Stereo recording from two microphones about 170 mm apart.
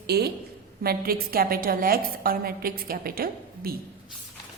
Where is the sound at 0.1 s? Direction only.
70° right (ahead or behind).